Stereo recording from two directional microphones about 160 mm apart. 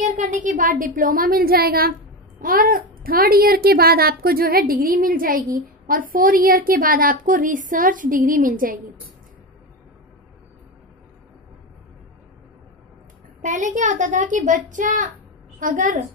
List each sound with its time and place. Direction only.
0.0 s speech: 50° right (ahead or behind)
13.4 s a child's voice: 55° right (ahead or behind)